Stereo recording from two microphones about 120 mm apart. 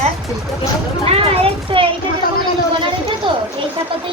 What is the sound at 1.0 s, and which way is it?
Speech, 55° right (ahead or behind).